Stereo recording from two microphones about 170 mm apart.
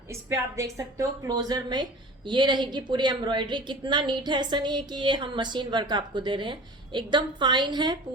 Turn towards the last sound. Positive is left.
turn(degrees=-25)  # may be behind; listen again after turning